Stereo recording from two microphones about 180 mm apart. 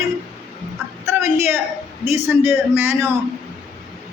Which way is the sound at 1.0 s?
15° right (ahead or behind).